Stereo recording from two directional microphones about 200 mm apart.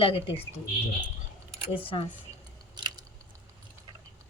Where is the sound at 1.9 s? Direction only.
25° left (ahead or behind).